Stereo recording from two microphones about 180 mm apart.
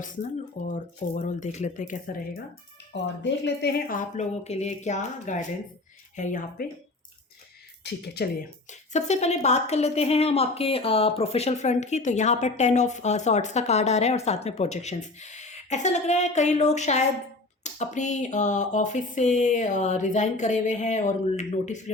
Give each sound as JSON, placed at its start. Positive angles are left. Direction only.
{"t": 0.7, "sound": "a woman's voice", "side_deg": 45}
{"t": 2.9, "sound": "speech", "side_deg": 75}
{"t": 7.9, "sound": "speech", "side_deg": 65}
{"t": 8.9, "sound": "a woman's voice", "side_deg": 40}